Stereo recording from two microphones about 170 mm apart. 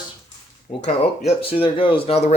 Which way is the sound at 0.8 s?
35° left (ahead or behind).